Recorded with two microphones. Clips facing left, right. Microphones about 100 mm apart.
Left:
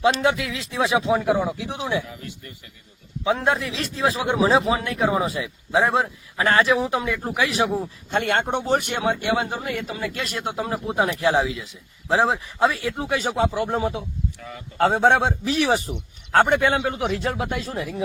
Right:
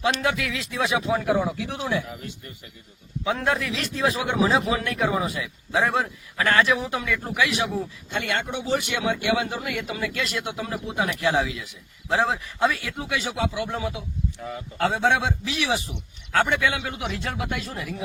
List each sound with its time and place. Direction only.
0.0 s a man's voice: 30° left (ahead or behind)
2.0 s speech: 25° right (ahead or behind)
3.2 s a man's voice: 30° left (ahead or behind)
8.1 s speech: 50° left (ahead or behind)
9.6 s speech: 35° left (ahead or behind)
10.2 s speech: 45° left (ahead or behind)
14.3 s speech: 25° right (ahead or behind)
14.8 s speech: 45° left (ahead or behind)
16.8 s speech: 35° left (ahead or behind)